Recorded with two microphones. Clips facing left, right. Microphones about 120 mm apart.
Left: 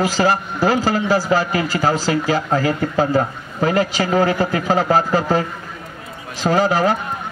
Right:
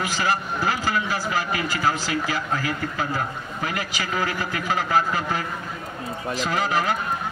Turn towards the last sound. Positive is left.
turn(degrees=35)  # may be behind; listen again after turning